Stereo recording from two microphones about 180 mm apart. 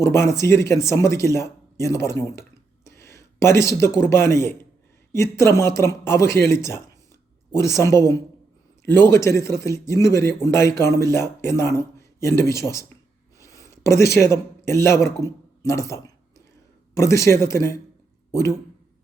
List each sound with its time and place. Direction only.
0.0 s speech: 15° left (ahead or behind)